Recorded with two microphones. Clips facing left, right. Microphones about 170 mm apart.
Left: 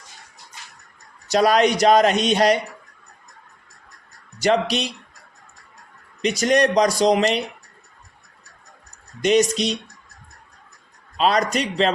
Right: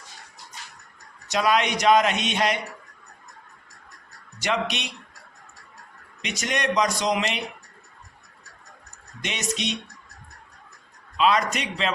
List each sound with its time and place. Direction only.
1.3 s speech: 35° left (ahead or behind)
4.4 s speech: 35° left (ahead or behind)
6.2 s speech: 35° left (ahead or behind)
9.2 s speech: 35° left (ahead or behind)
11.2 s speech: 35° left (ahead or behind)